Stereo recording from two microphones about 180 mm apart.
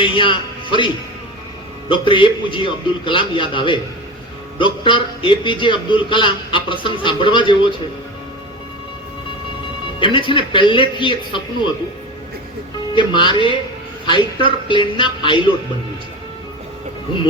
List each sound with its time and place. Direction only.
0.0 s a man's voice: 25° left (ahead or behind)
1.9 s a man's voice: 25° left (ahead or behind)
10.0 s a man's voice: 25° left (ahead or behind)
12.9 s a man's voice: 25° left (ahead or behind)